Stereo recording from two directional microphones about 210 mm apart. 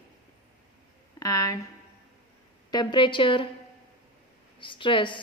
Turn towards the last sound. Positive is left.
turn(degrees=25)  # may be behind; listen again after turning